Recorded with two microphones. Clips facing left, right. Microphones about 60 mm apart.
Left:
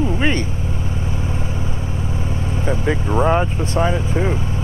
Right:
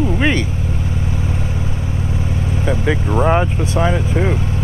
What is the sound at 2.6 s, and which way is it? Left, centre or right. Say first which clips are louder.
Speech: right 2 dB; right.